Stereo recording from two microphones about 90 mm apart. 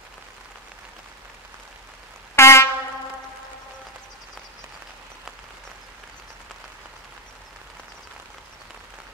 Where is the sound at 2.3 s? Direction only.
30° left (ahead or behind).